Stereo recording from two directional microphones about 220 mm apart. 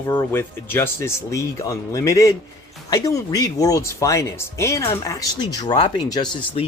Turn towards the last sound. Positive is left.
turn(degrees=20)  # may be behind; listen again after turning